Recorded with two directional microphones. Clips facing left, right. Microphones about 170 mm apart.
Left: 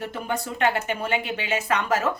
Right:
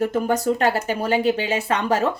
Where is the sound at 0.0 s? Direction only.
45° right (ahead or behind).